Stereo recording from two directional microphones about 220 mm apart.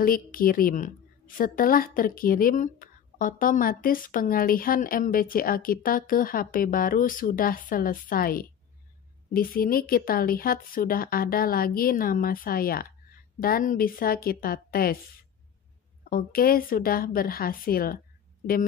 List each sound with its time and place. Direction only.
0.0 s a woman's voice: 40° left (ahead or behind)
16.1 s a woman's voice: 40° left (ahead or behind)